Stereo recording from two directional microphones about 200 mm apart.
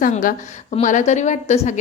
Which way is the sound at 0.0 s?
40° left (ahead or behind).